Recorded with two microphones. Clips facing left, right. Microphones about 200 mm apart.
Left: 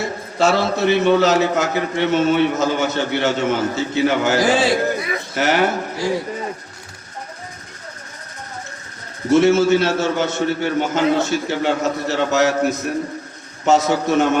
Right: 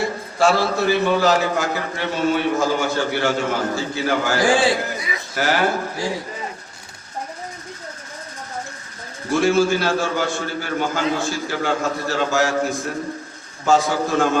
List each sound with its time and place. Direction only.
0.3 s a man's voice: 20° left (ahead or behind)
9.3 s a man's voice: 20° left (ahead or behind)